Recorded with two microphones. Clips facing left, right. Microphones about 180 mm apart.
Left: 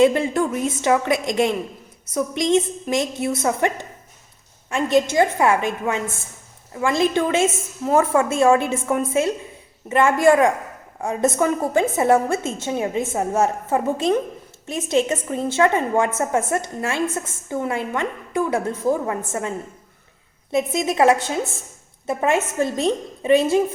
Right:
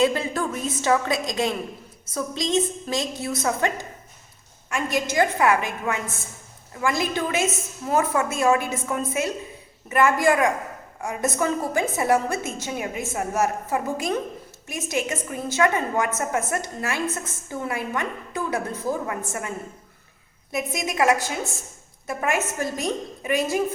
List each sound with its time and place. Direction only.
0.0 s a woman's voice: 25° left (ahead or behind)